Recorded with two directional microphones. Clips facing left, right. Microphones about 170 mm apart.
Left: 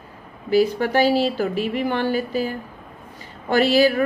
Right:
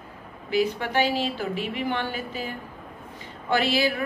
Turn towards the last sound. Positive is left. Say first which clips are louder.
# left 7 dB
turn(degrees=40)  # may be behind; listen again after turning